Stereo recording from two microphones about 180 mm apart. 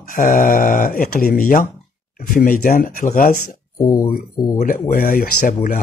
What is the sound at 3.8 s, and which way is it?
Speech, 15° left (ahead or behind).